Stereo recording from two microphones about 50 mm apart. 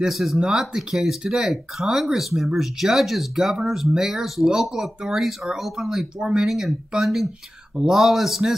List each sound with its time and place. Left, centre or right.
0.0 s speech: centre
7.7 s speech: centre
8.0 s speech: centre